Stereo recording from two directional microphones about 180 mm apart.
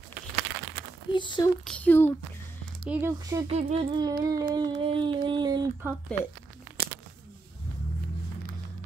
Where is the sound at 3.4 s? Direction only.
30° right (ahead or behind).